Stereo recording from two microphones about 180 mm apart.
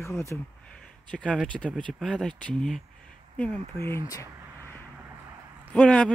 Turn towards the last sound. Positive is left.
turn(degrees=5)  # may be behind; listen again after turning